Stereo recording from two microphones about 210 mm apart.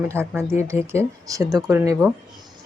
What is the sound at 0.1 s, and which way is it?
Speech, 10° right (ahead or behind).